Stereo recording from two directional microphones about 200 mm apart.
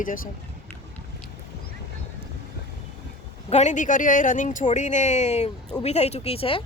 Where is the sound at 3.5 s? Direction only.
35° left (ahead or behind).